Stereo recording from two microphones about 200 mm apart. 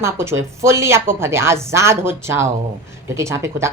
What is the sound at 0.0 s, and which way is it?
A woman's voice, 15° right (ahead or behind).